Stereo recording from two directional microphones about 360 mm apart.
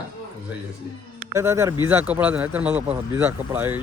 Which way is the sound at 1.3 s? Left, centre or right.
Centre.